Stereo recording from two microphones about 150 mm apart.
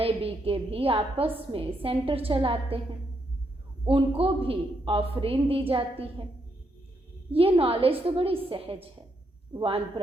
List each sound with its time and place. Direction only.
0.0 s a woman's voice: 40° right (ahead or behind)
4.2 s a woman's voice: 40° right (ahead or behind)
7.3 s a woman's voice: 40° right (ahead or behind)